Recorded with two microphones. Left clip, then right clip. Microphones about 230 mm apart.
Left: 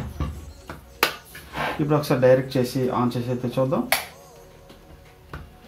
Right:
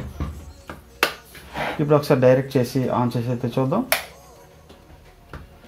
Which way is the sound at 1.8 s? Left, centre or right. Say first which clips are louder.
Right 3 dB; right.